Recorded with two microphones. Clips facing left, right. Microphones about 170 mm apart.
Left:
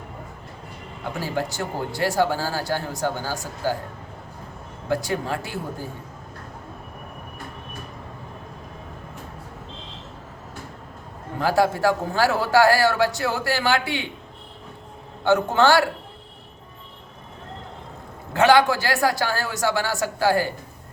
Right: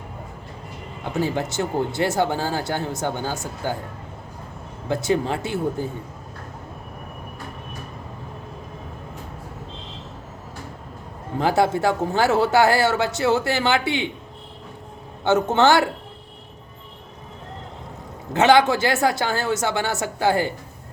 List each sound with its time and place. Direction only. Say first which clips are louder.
1.2 s speech: right 4 dB; 20° right (ahead or behind)
4.9 s speech: right 3 dB; 25° right (ahead or behind)
11.3 s speech: right 1 dB; 20° right (ahead or behind)
15.2 s speech: right 1 dB; 20° right (ahead or behind)
18.3 s speech: right 1 dB; 20° right (ahead or behind)